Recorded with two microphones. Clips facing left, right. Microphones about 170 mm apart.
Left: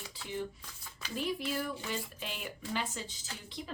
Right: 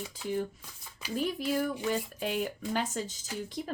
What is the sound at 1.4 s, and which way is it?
Speech, 45° right (ahead or behind).